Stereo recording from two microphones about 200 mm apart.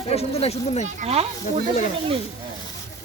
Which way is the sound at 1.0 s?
30° right (ahead or behind).